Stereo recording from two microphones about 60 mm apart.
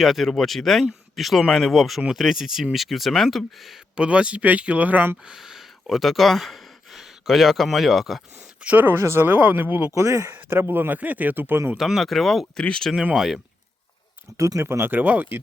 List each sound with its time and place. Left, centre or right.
0.0 s speech: centre
3.9 s speech: centre
5.2 s speech: centre
8.6 s speech: right
9.0 s speech: right
9.9 s speech: right
10.2 s speech: right
11.8 s speech: centre
12.5 s speech: centre
13.1 s a man's voice: centre
14.3 s speech: right
14.6 s speech: right